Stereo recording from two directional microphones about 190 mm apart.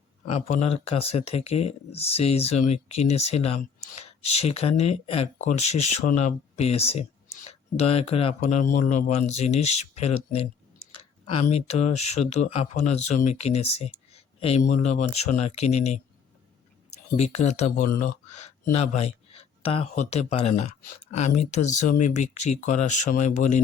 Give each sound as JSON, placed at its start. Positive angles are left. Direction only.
{"t": 0.3, "sound": "speech", "side_deg": 35}
{"t": 17.2, "sound": "speech", "side_deg": 35}
{"t": 18.9, "sound": "speech", "side_deg": 35}